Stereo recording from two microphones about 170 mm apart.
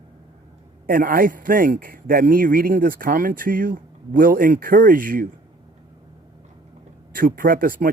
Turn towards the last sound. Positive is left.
turn(degrees=-55)  # may be behind; listen again after turning